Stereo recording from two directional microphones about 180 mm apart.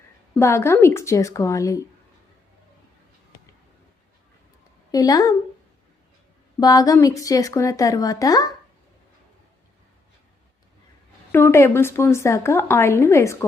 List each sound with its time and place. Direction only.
0.3 s a woman's voice: 15° left (ahead or behind)
4.9 s a woman's voice: 20° left (ahead or behind)
6.6 s a woman's voice: 20° left (ahead or behind)
11.3 s a woman's voice: 15° left (ahead or behind)